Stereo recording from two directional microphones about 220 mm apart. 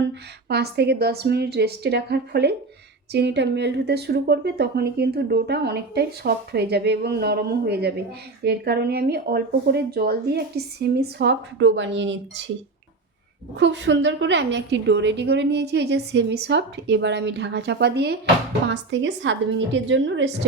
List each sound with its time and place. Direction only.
0.0 s a woman's voice: 50° right (ahead or behind)
13.6 s a woman's voice: 55° right (ahead or behind)